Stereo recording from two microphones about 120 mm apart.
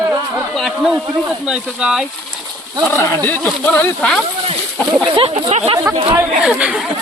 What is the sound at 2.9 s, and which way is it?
Speech, 20° left (ahead or behind).